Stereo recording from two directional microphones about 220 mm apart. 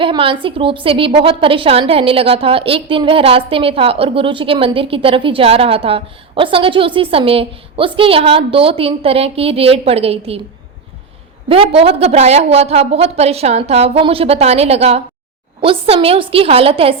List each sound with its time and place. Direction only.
0.0 s a woman's voice: 25° right (ahead or behind)
11.4 s a woman's voice: 25° right (ahead or behind)